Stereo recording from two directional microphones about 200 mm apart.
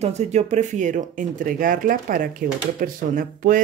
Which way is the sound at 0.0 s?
35° right (ahead or behind).